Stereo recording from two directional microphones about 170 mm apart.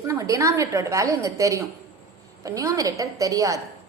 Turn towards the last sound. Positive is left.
turn(degrees=-20)  # may be behind; listen again after turning